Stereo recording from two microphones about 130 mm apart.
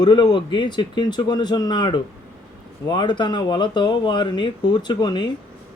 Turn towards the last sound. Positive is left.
turn(degrees=35)  # may be behind; listen again after turning